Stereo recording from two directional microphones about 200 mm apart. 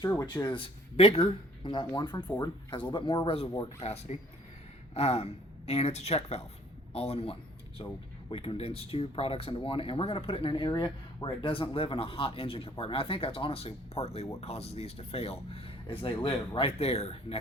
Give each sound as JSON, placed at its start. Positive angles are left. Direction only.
{"t": 0.1, "sound": "speech", "side_deg": 20}